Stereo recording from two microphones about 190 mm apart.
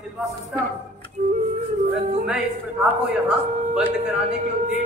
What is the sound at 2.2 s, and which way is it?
Speech, 5° right (ahead or behind).